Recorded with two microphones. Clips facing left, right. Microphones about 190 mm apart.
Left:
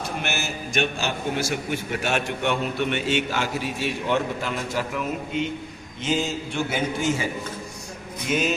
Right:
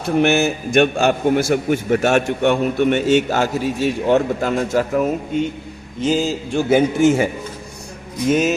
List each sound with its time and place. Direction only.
0.2 s a man's voice: 60° right (ahead or behind)
8.3 s a man's voice: 45° right (ahead or behind)